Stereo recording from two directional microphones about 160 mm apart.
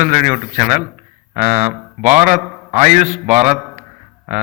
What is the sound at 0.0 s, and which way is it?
A man's voice, 50° right (ahead or behind).